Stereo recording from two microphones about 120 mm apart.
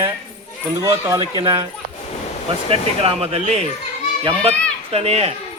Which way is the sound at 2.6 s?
55° right (ahead or behind).